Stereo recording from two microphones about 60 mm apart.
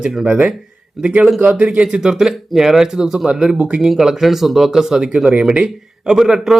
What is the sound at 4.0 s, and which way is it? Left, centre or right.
Speech, centre.